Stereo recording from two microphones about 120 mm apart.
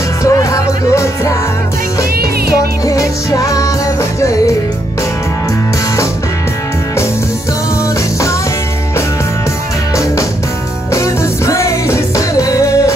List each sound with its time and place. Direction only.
0.2 s music: 25° left (ahead or behind)
2.8 s music: 30° left (ahead or behind)
10.9 s music: 25° left (ahead or behind)